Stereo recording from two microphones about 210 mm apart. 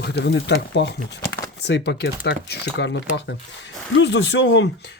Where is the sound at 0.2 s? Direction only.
55° left (ahead or behind).